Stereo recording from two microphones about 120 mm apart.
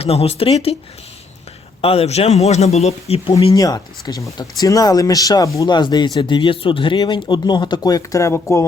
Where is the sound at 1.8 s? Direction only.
55° left (ahead or behind).